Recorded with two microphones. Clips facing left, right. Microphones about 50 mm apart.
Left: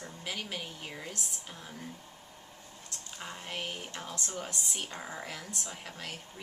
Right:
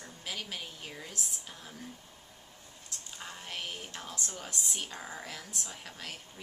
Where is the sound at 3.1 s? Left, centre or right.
Centre.